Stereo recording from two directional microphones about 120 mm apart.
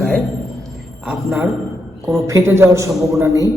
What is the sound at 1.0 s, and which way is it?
Speech, 5° right (ahead or behind).